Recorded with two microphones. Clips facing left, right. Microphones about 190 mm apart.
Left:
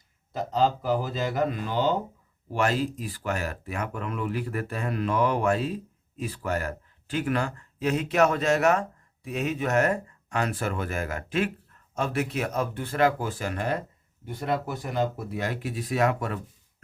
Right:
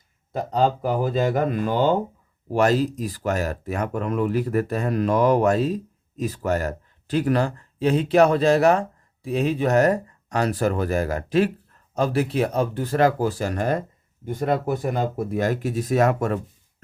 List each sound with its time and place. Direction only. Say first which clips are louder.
0.3 s speech: right 3 dB; 55° right (ahead or behind)
2.5 s speech: right 6 dB; 40° right (ahead or behind)